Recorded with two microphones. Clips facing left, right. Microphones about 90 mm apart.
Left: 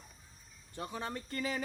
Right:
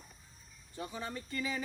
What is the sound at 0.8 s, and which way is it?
Speech, 55° left (ahead or behind).